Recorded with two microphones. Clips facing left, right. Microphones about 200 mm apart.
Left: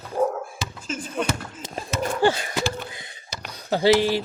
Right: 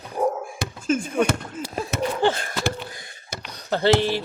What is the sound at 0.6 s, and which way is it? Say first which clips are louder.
Speech: right 8 dB; 55° right (ahead or behind).